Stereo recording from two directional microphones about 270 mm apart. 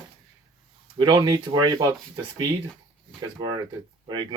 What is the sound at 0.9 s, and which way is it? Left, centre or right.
Speech, centre.